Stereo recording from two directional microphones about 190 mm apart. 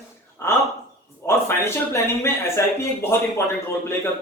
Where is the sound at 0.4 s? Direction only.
15° left (ahead or behind).